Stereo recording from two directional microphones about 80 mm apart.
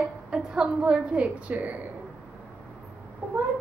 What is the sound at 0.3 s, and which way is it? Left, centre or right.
Speech, centre.